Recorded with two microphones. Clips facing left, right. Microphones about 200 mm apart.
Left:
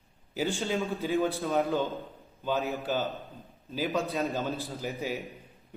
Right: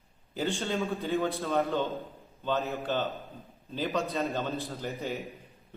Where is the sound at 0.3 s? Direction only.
Centre (ahead or behind).